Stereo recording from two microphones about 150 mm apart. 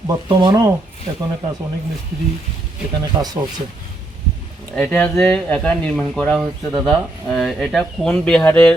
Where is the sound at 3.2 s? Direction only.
30° right (ahead or behind).